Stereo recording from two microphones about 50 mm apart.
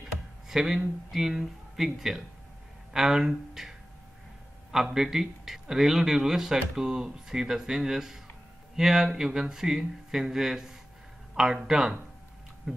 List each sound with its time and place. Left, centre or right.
0.5 s speech: centre
4.9 s speech: centre